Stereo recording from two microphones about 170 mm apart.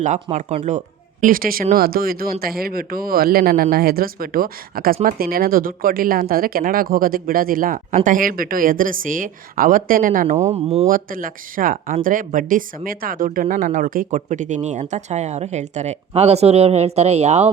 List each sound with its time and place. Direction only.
0.0 s speech: 45° right (ahead or behind)
1.2 s speech: 55° right (ahead or behind)
10.5 s speech: 35° right (ahead or behind)
10.8 s speech: 55° right (ahead or behind)